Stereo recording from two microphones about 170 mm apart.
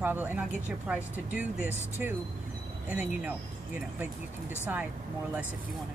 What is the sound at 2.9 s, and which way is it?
Speech, 10° right (ahead or behind).